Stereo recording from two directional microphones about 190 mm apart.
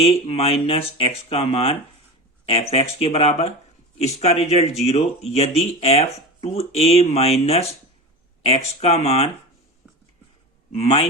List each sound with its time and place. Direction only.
0.0 s speech: 30° left (ahead or behind)
10.8 s speech: 30° left (ahead or behind)